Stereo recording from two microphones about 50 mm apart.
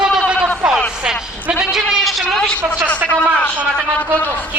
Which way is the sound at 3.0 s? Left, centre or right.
Right.